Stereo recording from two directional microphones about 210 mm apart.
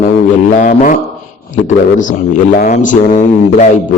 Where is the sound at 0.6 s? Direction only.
40° left (ahead or behind).